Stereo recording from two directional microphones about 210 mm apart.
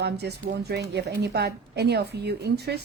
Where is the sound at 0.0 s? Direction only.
50° right (ahead or behind).